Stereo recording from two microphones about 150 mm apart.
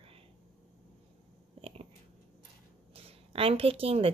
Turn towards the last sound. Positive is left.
turn(degrees=-40)  # may be behind; listen again after turning